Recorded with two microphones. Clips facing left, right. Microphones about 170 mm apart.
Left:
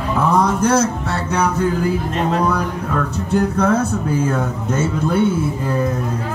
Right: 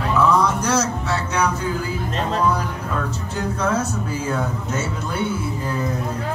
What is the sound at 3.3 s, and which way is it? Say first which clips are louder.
Speech: left 8 dB; 60° left (ahead or behind).